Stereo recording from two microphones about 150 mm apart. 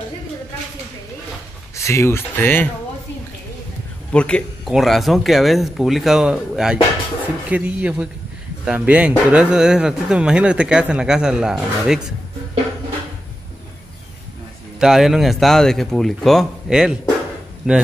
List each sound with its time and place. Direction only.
1.8 s speech: 20° left (ahead or behind)
4.1 s a man's voice: 5° left (ahead or behind)
14.8 s speech: centre (ahead or behind)